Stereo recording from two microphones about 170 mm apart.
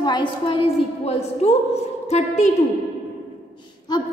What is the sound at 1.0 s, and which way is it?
A woman's voice, 40° left (ahead or behind).